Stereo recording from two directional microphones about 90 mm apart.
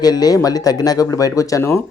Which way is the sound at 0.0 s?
45° left (ahead or behind).